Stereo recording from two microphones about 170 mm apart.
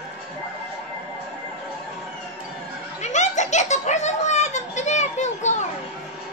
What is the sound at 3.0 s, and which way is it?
Giggle, 45° left (ahead or behind).